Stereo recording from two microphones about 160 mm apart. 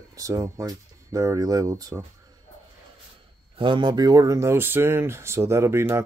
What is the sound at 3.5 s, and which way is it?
Speech, 30° right (ahead or behind).